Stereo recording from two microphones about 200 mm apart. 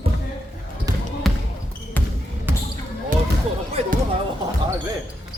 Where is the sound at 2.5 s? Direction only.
10° right (ahead or behind).